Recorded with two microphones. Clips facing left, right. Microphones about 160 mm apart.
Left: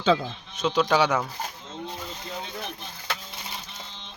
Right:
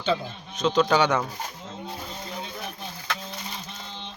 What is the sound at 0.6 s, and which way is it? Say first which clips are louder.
Speech: right 1 dB; 5° left (ahead or behind).